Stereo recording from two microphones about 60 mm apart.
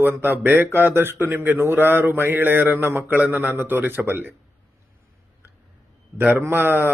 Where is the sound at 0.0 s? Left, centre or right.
Right.